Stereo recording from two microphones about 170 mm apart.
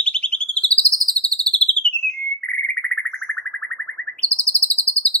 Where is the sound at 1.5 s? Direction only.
5° left (ahead or behind).